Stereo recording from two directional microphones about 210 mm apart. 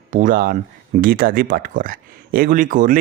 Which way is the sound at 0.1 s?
40° right (ahead or behind).